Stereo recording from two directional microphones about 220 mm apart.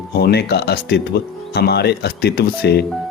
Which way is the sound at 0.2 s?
45° left (ahead or behind).